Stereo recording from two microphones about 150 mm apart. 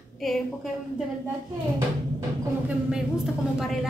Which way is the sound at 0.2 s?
Centre (ahead or behind).